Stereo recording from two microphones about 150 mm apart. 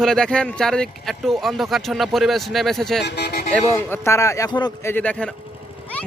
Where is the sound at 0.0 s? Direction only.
5° left (ahead or behind).